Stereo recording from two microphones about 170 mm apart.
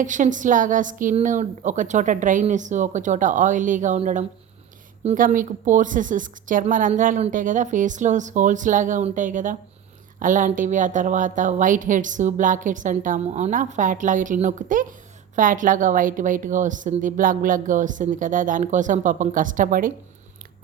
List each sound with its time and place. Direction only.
0.0 s a woman's voice: 50° right (ahead or behind)